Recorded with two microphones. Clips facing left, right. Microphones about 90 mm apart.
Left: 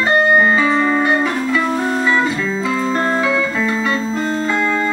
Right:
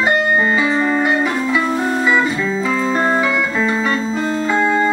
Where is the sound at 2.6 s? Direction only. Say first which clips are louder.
Even; 45° right (ahead or behind).